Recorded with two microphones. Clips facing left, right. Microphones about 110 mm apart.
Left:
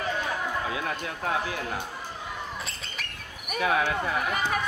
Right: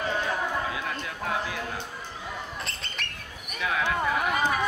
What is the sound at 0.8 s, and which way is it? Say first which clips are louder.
Speech: left 1 dB; 40° left (ahead or behind).